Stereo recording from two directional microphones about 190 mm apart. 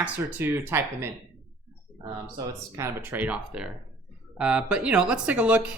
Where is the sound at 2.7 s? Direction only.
10° right (ahead or behind).